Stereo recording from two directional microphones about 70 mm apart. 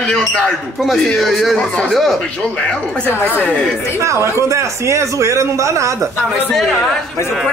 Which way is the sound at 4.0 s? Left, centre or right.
Right.